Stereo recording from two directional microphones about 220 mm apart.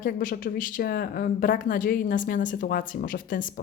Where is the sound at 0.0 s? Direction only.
40° left (ahead or behind).